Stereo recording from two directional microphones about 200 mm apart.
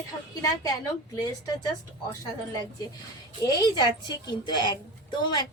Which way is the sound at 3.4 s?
20° left (ahead or behind).